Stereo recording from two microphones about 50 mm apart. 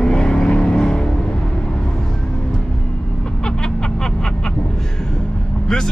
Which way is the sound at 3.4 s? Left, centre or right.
Centre.